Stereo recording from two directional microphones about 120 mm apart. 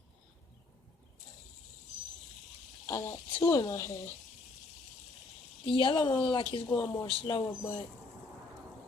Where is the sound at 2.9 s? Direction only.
25° left (ahead or behind).